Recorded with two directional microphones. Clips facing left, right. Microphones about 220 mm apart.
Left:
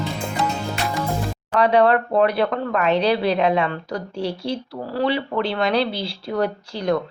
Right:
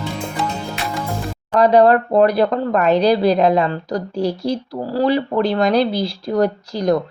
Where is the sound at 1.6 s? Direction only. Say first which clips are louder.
Right 4 dB; 40° right (ahead or behind).